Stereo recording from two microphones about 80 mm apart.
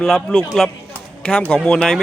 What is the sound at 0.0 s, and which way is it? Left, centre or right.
Speech, centre.